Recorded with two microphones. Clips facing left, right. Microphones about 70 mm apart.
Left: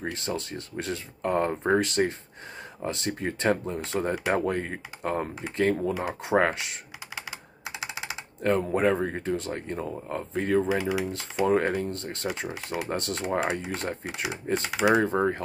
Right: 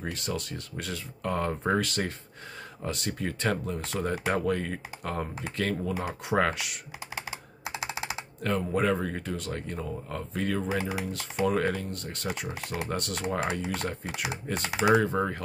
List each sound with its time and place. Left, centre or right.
0.0 s speech: left
8.4 s speech: left